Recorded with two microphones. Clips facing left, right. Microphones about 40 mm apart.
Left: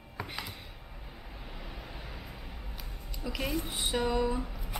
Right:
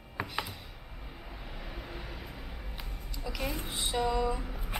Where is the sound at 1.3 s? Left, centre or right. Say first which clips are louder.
Right 1 dB; centre.